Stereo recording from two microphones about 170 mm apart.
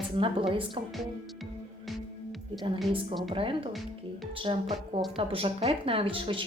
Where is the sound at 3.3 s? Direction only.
30° right (ahead or behind).